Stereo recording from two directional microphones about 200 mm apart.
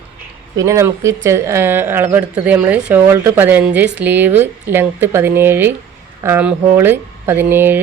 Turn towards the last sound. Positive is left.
turn(degrees=-10)  # may be behind; listen again after turning